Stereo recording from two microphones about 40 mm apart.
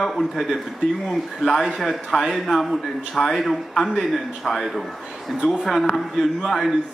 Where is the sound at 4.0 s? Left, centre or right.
Centre.